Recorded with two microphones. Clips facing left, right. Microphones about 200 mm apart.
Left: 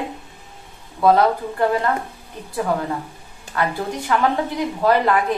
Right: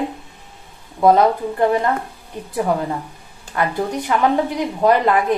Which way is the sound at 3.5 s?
20° right (ahead or behind).